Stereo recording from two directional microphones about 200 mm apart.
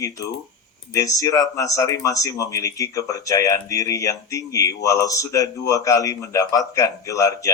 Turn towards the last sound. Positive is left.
turn(degrees=15)  # may be behind; listen again after turning